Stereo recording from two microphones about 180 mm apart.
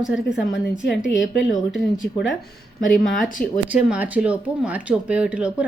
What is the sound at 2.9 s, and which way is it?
Speech, centre (ahead or behind).